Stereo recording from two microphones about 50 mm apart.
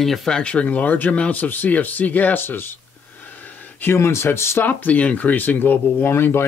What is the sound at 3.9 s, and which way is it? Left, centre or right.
Speech, left.